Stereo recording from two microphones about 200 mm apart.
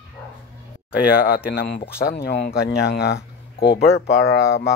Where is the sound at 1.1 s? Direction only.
50° left (ahead or behind).